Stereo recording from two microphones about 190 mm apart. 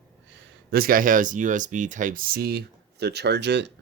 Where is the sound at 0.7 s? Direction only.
50° right (ahead or behind).